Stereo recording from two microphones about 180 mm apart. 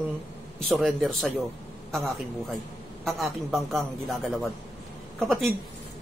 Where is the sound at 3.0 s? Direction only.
Centre (ahead or behind).